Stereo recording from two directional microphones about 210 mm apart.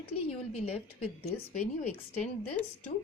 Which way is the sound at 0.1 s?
90° left.